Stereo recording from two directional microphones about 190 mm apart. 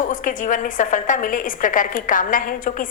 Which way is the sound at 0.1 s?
45° left (ahead or behind).